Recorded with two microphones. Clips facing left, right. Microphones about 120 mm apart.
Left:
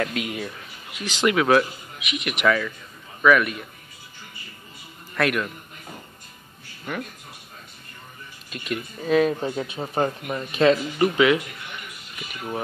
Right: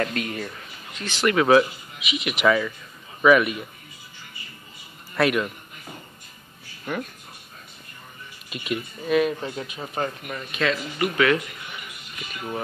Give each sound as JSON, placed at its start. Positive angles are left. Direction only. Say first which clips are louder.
{"t": 0.0, "sound": "speech", "louder": "even", "side_deg": 5}
{"t": 1.3, "sound": "a man's voice", "louder": "right 3 dB", "side_deg": 0}
{"t": 5.1, "sound": "speech", "louder": "right 2 dB", "side_deg": -5}
{"t": 8.5, "sound": "speech", "louder": "right 1 dB", "side_deg": -5}
{"t": 9.1, "sound": "speech", "louder": "left 2 dB", "side_deg": 30}
{"t": 11.1, "sound": "speech", "louder": "right 2 dB", "side_deg": 15}